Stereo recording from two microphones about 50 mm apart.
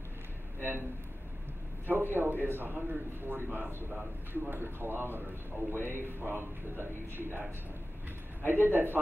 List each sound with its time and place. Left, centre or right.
1.9 s a man's voice: right